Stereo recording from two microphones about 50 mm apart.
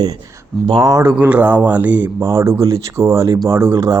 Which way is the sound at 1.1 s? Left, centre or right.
Right.